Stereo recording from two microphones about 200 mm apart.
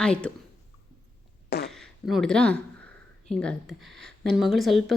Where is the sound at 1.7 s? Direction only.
Centre (ahead or behind).